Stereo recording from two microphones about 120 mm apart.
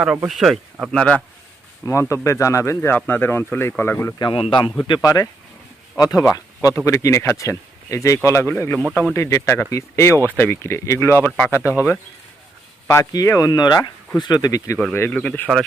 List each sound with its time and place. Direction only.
0.3 s speech: centre (ahead or behind)
1.8 s speech: 25° left (ahead or behind)
4.2 s a man's voice: 45° left (ahead or behind)
5.0 s speech: 30° left (ahead or behind)
8.8 s speech: 5° left (ahead or behind)
9.1 s speech: 25° left (ahead or behind)
12.9 s speech: 25° left (ahead or behind)
14.9 s speech: 15° left (ahead or behind)